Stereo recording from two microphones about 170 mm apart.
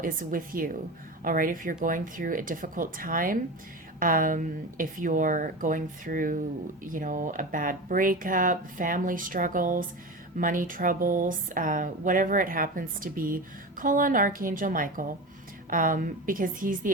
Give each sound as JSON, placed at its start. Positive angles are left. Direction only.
{"t": 0.0, "sound": "a woman's voice", "side_deg": -55}